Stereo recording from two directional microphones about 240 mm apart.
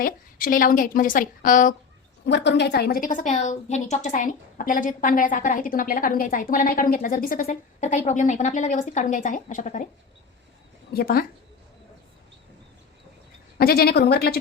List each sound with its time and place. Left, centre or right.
0.0 s a woman's voice: left
2.2 s a woman's voice: left
10.9 s a woman's voice: left
13.6 s a woman's voice: left